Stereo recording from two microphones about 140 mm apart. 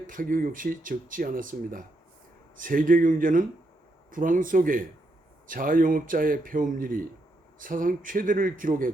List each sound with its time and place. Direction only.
0.1 s speech: 80° right